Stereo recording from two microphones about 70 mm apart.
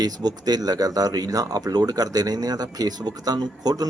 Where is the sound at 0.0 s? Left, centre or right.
Right.